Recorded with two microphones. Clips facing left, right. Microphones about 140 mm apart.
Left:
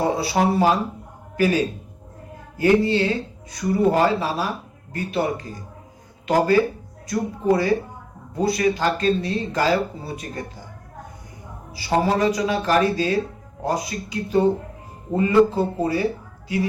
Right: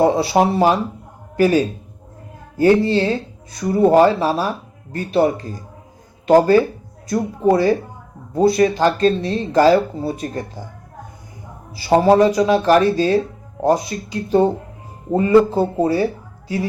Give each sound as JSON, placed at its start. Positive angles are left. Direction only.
{"t": 0.3, "sound": "speech", "side_deg": -25}
{"t": 11.9, "sound": "speech", "side_deg": -30}